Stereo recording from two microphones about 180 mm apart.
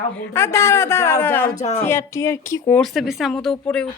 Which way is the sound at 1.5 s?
40° left (ahead or behind).